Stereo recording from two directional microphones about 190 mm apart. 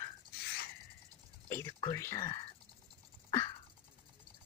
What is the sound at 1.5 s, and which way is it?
Speech, 15° left (ahead or behind).